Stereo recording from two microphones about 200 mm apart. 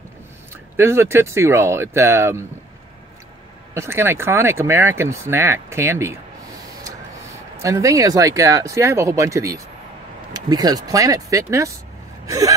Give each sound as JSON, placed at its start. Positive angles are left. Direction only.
{"t": 0.7, "sound": "speech", "side_deg": -10}
{"t": 3.7, "sound": "speech", "side_deg": -15}
{"t": 7.5, "sound": "speech", "side_deg": -15}